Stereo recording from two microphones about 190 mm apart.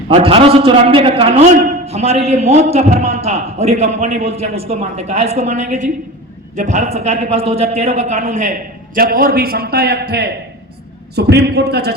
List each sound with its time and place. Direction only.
0.1 s a man's voice: 30° right (ahead or behind); by 11.9 s 60° right (ahead or behind)